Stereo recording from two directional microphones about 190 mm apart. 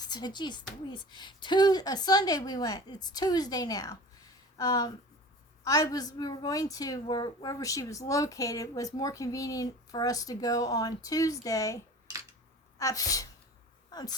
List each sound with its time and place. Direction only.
0.0 s a woman's voice: 20° left (ahead or behind)
12.8 s a woman's voice: 15° left (ahead or behind)